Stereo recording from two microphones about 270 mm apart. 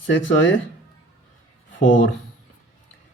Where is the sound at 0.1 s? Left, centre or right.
Left.